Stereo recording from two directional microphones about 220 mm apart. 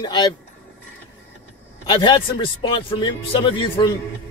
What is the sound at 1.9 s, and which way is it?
A man's voice, 20° left (ahead or behind).